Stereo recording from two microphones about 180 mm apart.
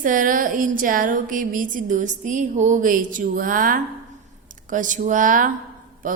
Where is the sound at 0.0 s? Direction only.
50° right (ahead or behind).